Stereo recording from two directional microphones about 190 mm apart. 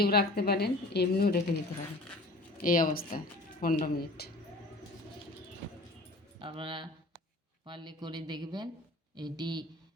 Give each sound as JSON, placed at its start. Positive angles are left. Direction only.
{"t": 0.0, "sound": "a woman's voice", "side_deg": 55}
{"t": 2.6, "sound": "speech", "side_deg": 45}
{"t": 6.4, "sound": "speech", "side_deg": -25}